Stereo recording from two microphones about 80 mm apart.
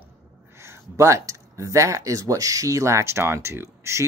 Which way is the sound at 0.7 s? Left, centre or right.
Right.